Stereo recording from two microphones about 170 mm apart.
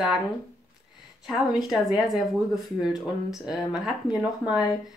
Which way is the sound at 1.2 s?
Centre (ahead or behind).